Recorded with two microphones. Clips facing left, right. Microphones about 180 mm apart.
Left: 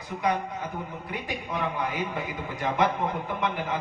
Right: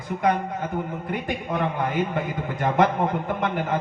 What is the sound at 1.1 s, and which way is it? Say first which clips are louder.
A man's voice: right 4 dB; 50° right (ahead or behind).